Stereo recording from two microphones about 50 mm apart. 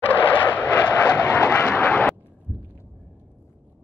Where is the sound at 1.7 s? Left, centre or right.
Left.